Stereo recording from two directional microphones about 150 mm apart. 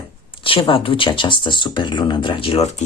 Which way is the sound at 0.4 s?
35° left (ahead or behind).